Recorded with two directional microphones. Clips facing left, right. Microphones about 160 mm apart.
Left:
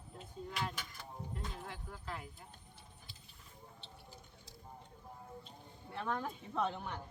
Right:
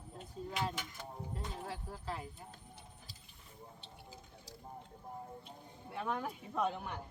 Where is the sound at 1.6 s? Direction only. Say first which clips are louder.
Right 4 dB; 35° right (ahead or behind).